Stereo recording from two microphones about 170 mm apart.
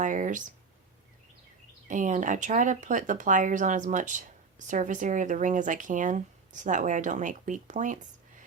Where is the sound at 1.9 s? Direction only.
45° right (ahead or behind).